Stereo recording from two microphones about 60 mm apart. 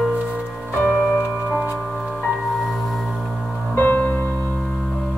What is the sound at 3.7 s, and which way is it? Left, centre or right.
Music, left.